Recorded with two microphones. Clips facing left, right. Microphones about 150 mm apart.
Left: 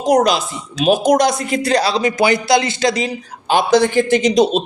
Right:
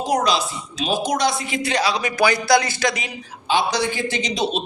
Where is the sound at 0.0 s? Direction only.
45° left (ahead or behind).